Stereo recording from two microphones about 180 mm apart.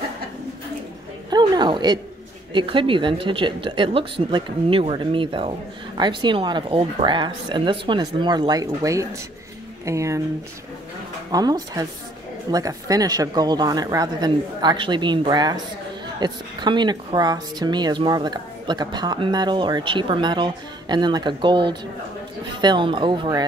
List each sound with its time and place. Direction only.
1.3 s a woman's voice: 25° right (ahead or behind)
11.3 s a woman's voice: 20° right (ahead or behind)